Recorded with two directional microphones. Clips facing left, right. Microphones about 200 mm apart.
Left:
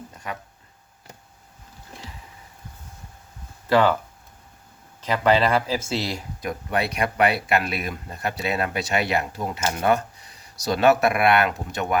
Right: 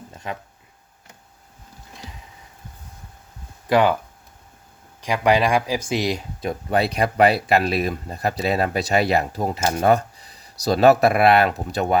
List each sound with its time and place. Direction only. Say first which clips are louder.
3.7 s speech: right 1 dB; 15° right (ahead or behind)
4.9 s speech: right 1 dB; 15° right (ahead or behind); by 11.9 s 35° right (ahead or behind)